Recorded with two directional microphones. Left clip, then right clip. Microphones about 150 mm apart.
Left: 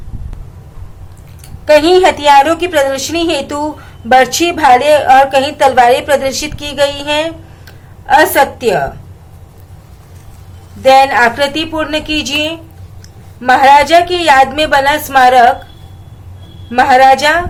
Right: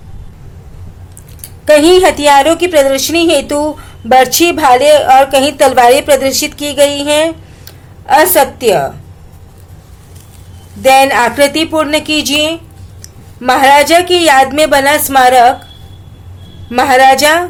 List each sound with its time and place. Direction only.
1.6 s a woman's voice: 30° right (ahead or behind)
10.8 s a woman's voice: 30° right (ahead or behind)
16.6 s a woman's voice: 35° right (ahead or behind)